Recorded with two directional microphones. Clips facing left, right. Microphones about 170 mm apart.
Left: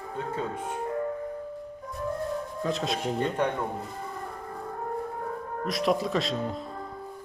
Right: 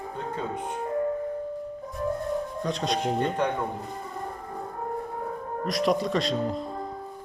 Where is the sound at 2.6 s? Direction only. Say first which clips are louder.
Even; centre (ahead or behind).